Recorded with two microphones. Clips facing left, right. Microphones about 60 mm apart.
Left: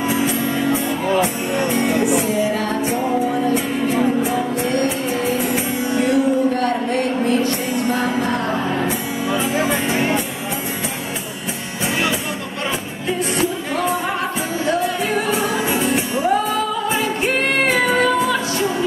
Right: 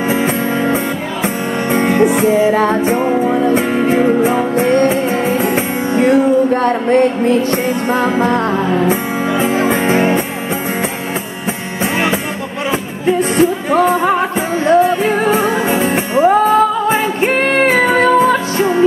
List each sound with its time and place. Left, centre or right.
0.1 s music: right
13.0 s music: right